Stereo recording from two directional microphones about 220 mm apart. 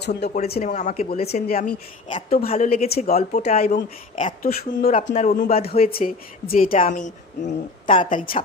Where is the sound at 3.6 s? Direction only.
40° left (ahead or behind).